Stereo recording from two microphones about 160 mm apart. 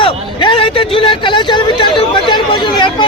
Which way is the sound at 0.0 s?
30° left (ahead or behind).